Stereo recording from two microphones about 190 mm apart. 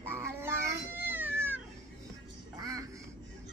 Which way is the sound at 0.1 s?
15° right (ahead or behind).